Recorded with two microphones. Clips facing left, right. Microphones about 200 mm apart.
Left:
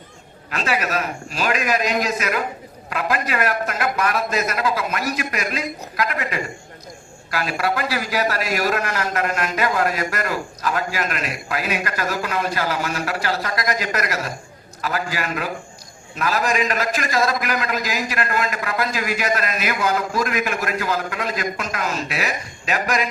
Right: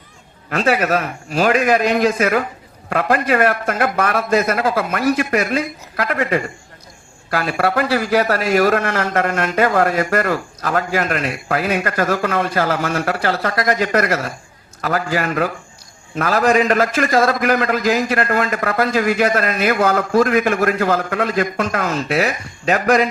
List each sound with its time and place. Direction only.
0.7 s a man's voice: 50° right (ahead or behind)
22.2 s speech: 35° right (ahead or behind)